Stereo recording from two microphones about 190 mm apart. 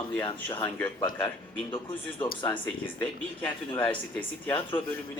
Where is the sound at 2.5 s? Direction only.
5° left (ahead or behind).